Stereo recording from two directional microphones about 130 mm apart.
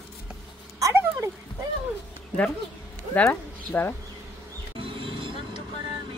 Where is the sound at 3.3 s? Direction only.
15° left (ahead or behind).